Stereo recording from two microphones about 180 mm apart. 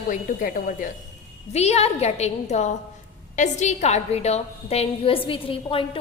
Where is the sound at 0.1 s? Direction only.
50° left (ahead or behind).